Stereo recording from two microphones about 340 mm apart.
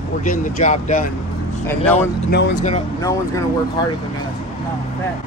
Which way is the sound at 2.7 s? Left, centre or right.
Centre.